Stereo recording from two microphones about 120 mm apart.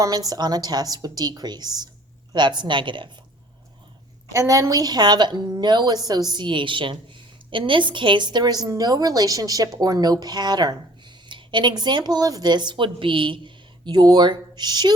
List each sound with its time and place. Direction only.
0.0 s a woman's voice: 30° right (ahead or behind)
4.3 s a woman's voice: 30° right (ahead or behind)